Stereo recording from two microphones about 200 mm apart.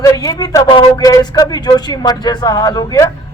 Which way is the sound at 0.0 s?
15° left (ahead or behind).